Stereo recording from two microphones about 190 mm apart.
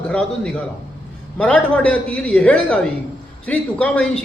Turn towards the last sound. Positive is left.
turn(degrees=5)  # may be behind; listen again after turning